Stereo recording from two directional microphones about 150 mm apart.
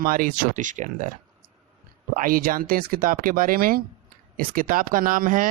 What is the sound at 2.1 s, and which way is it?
A man's voice, 70° right (ahead or behind).